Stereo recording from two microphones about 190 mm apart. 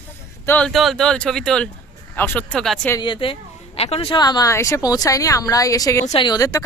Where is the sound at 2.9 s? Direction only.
25° left (ahead or behind).